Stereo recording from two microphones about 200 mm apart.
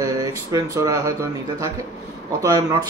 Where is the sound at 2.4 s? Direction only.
15° right (ahead or behind).